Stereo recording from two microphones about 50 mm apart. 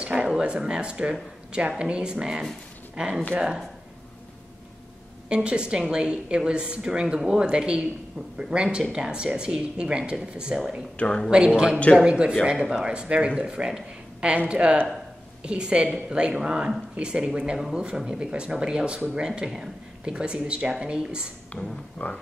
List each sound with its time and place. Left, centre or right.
0.0 s a woman's voice: right
5.3 s a woman's voice: right
11.0 s speech: centre
11.2 s a woman's voice: centre
21.5 s speech: left